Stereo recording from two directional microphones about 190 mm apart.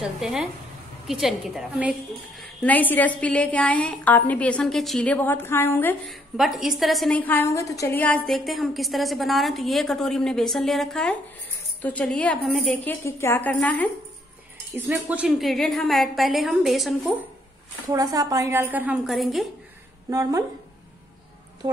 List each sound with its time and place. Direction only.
0.0 s a woman's voice: centre (ahead or behind)
2.6 s a woman's voice: 10° left (ahead or behind)
6.3 s a woman's voice: centre (ahead or behind)
14.7 s a woman's voice: 10° right (ahead or behind)
17.9 s a woman's voice: 20° right (ahead or behind); by 19.4 s centre (ahead or behind)
20.1 s a woman's voice: 20° right (ahead or behind)